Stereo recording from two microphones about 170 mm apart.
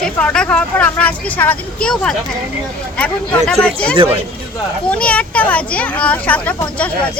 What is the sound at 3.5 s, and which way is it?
Speech, 5° left (ahead or behind).